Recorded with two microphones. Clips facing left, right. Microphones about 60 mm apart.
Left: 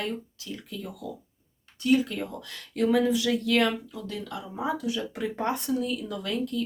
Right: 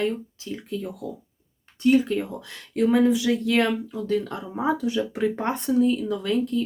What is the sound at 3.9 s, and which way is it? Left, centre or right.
A woman's voice, right.